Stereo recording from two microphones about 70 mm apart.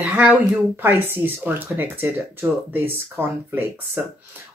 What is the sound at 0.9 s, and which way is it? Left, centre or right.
A man's voice, right.